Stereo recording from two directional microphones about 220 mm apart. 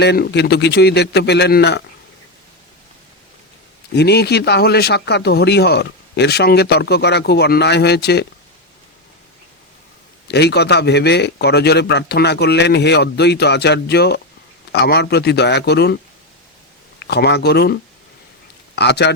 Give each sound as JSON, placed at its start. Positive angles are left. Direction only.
{"t": 0.0, "sound": "speech", "side_deg": 50}
{"t": 3.9, "sound": "speech", "side_deg": 50}
{"t": 10.2, "sound": "speech", "side_deg": 50}
{"t": 17.0, "sound": "speech", "side_deg": 50}
{"t": 18.8, "sound": "speech", "side_deg": 50}